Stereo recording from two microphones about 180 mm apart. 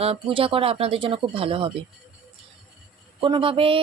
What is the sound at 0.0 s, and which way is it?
Speech, 30° right (ahead or behind).